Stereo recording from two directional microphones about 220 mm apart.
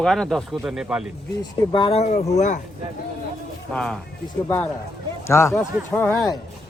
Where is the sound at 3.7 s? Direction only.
5° left (ahead or behind).